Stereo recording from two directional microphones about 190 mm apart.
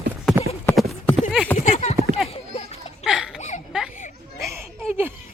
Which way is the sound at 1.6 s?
40° left (ahead or behind).